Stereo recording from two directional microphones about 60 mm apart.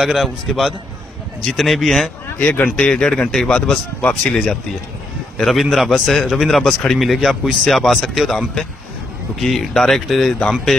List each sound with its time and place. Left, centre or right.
0.0 s a man's voice: centre
2.3 s speech: left
2.9 s speech: centre
4.0 s speech: left
4.3 s a man's voice: centre